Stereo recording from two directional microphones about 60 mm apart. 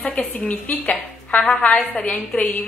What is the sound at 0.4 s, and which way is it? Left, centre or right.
A woman's voice, left.